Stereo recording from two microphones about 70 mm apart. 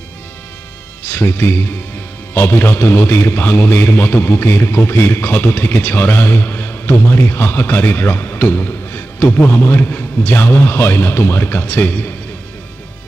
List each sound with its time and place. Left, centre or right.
1.0 s a man's voice: left